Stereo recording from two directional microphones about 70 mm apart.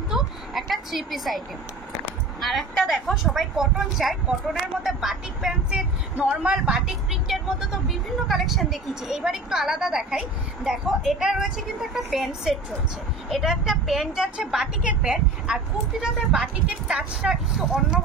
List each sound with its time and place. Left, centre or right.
0.1 s a sound: centre
2.4 s speech: centre
7.2 s speech: centre